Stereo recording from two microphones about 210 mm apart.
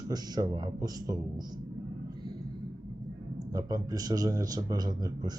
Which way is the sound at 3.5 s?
15° right (ahead or behind).